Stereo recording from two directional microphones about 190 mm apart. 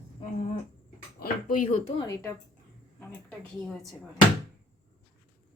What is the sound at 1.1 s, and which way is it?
Speech, 45° left (ahead or behind).